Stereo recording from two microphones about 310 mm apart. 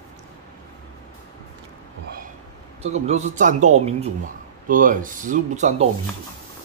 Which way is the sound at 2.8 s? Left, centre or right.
Right.